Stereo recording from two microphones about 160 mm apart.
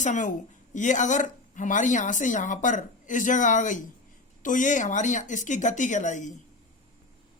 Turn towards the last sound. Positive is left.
turn(degrees=50)  # may be behind; listen again after turning